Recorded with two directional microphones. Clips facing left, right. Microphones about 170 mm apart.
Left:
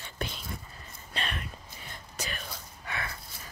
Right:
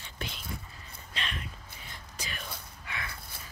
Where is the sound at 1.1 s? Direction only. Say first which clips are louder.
Left 3 dB; 45° left (ahead or behind).